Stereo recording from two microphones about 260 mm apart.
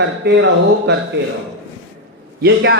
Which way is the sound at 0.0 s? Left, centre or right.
Right.